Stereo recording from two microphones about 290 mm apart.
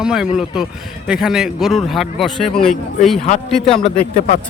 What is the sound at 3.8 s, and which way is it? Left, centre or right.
Speech, left.